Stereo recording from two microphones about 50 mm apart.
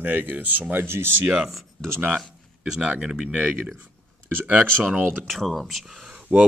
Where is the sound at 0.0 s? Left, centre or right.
Right.